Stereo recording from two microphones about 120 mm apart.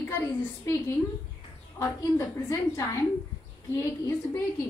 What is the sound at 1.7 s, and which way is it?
A woman's voice, 20° left (ahead or behind).